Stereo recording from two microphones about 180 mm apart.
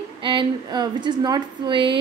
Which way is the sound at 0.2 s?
25° right (ahead or behind).